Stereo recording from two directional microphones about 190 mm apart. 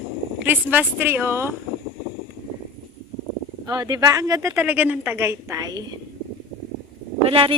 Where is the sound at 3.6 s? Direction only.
20° right (ahead or behind).